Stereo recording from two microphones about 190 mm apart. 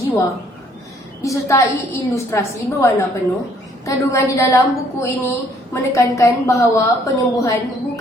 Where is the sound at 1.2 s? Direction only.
15° left (ahead or behind).